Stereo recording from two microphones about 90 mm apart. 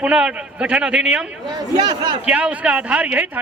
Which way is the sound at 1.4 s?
50° right (ahead or behind).